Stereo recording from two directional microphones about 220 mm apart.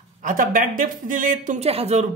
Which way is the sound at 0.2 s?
40° right (ahead or behind).